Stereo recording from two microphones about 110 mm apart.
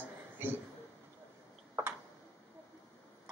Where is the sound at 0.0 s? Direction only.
20° right (ahead or behind).